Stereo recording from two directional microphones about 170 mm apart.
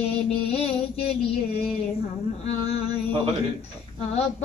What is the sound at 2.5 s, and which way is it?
Child singing, 35° left (ahead or behind).